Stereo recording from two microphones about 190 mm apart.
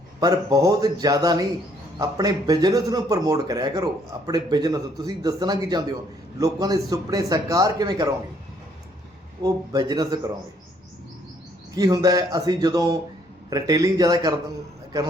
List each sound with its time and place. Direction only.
0.2 s speech: 20° right (ahead or behind)
9.4 s speech: 20° right (ahead or behind)
11.7 s speech: 20° right (ahead or behind)